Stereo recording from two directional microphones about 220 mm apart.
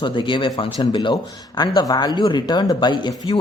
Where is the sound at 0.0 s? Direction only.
20° left (ahead or behind).